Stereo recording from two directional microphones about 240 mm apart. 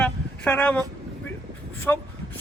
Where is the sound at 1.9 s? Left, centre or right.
Centre.